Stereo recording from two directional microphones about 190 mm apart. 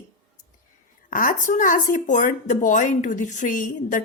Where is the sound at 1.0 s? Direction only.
45° left (ahead or behind).